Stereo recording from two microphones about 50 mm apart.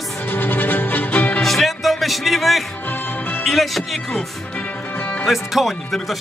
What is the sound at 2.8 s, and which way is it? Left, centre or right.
Music, left.